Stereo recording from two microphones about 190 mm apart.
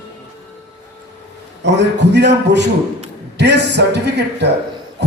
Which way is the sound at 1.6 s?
65° right (ahead or behind).